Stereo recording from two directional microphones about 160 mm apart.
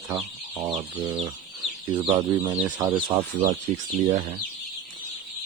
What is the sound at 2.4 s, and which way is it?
Chicken, 20° right (ahead or behind).